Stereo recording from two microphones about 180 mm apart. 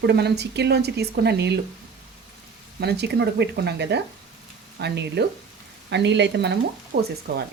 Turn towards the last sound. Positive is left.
turn(degrees=-60)  # may be behind; listen again after turning